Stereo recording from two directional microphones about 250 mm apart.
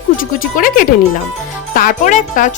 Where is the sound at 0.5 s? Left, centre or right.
Left.